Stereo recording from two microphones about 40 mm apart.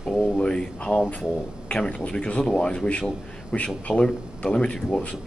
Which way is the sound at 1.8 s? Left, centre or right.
Left.